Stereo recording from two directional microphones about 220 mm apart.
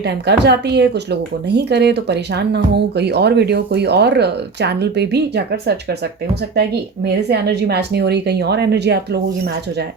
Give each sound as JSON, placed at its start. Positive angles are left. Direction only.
{"t": 0.0, "sound": "speech", "side_deg": -50}